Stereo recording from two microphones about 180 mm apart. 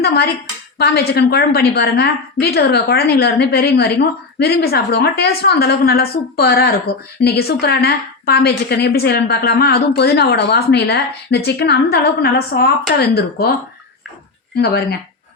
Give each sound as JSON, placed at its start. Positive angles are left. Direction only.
{"t": 0.0, "sound": "a woman's voice", "side_deg": 65}
{"t": 14.6, "sound": "a woman's voice", "side_deg": 60}